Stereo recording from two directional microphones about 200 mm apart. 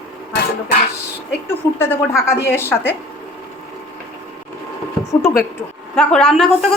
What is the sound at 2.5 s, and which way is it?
Speech, 10° left (ahead or behind).